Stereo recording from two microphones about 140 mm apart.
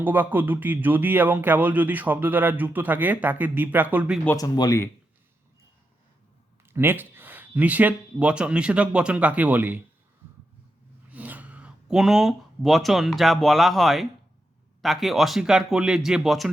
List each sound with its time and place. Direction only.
0.0 s speech: 15° right (ahead or behind)
4.4 s speech: 25° left (ahead or behind)
6.7 s speech: 15° right (ahead or behind)
11.1 s speech: 10° right (ahead or behind)